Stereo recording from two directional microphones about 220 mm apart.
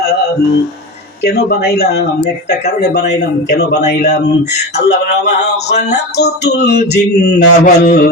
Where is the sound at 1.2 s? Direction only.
45° left (ahead or behind).